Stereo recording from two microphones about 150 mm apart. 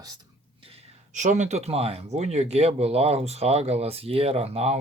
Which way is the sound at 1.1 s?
55° right (ahead or behind).